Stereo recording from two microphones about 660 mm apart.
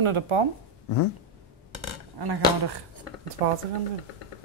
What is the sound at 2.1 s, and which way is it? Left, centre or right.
Speech, right.